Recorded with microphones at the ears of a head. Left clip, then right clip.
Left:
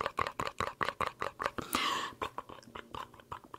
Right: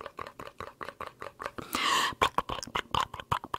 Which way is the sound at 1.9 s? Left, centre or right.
Right.